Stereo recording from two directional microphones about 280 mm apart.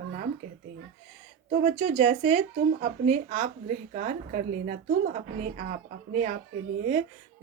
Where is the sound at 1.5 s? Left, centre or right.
Right.